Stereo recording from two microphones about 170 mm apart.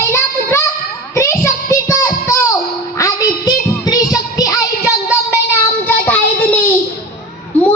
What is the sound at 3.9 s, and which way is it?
Music, 20° left (ahead or behind).